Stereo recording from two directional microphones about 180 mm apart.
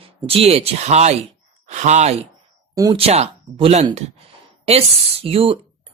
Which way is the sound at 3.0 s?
35° right (ahead or behind).